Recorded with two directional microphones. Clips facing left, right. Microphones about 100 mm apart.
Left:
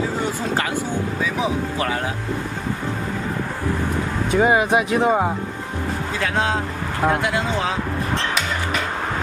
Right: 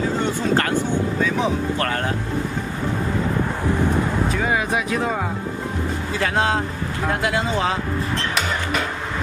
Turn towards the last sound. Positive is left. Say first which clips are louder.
# right 1 dB
turn(degrees=0)  # may be behind; listen again after turning